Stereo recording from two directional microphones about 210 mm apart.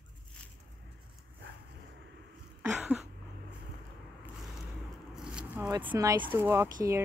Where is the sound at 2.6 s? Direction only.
5° right (ahead or behind).